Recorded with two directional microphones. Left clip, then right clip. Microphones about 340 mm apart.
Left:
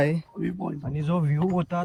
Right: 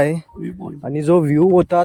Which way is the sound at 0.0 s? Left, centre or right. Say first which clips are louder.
Right 7 dB; centre.